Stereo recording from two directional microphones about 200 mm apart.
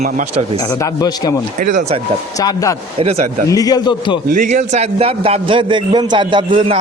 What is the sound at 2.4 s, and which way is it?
Speech, 15° left (ahead or behind).